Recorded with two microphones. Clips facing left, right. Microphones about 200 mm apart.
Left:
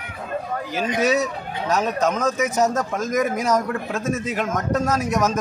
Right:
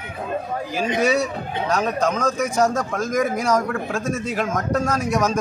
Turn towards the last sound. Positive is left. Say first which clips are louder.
# even
turn(degrees=5)  # may be behind; listen again after turning